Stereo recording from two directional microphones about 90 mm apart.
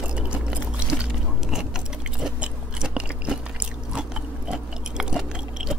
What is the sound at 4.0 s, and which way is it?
Chewing, 10° right (ahead or behind).